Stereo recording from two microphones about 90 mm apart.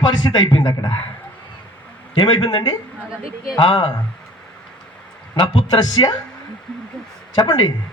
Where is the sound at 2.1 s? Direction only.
65° left (ahead or behind).